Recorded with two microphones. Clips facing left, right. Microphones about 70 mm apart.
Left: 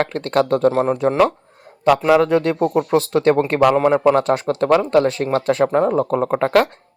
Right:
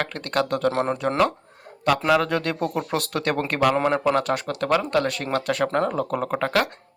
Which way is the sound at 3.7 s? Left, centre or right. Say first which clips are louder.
Left 7 dB; centre.